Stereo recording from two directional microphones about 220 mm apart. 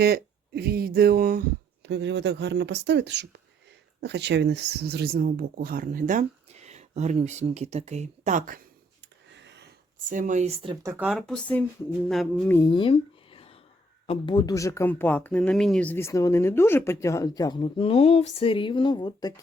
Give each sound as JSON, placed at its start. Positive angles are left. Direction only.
{"t": 0.0, "sound": "speech", "side_deg": -45}
{"t": 9.3, "sound": "a sound", "side_deg": -50}
{"t": 10.1, "sound": "speech", "side_deg": -35}
{"t": 10.9, "sound": "speech", "side_deg": -5}
{"t": 12.5, "sound": "a sound", "side_deg": 20}
{"t": 14.1, "sound": "speech", "side_deg": 20}